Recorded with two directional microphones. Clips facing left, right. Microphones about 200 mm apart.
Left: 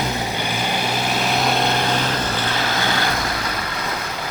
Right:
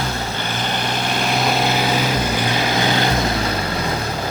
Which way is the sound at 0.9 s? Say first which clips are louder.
Right 2 dB; 5° left (ahead or behind).